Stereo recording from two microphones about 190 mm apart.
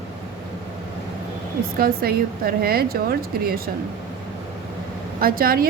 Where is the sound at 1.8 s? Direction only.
50° right (ahead or behind).